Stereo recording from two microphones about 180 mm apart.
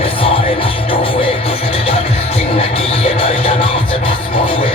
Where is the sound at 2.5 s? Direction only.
30° left (ahead or behind).